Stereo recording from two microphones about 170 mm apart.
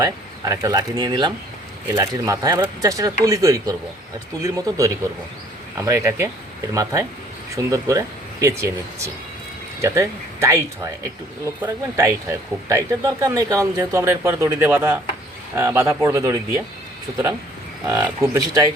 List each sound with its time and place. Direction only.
0.0 s speech: 20° right (ahead or behind)
7.5 s speech: 20° right (ahead or behind)